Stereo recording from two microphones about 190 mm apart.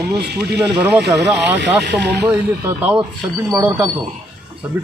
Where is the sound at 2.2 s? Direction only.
10° right (ahead or behind).